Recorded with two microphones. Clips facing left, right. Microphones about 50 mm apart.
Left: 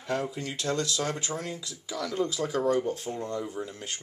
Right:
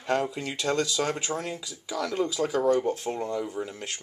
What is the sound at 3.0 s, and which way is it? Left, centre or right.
Speech, right.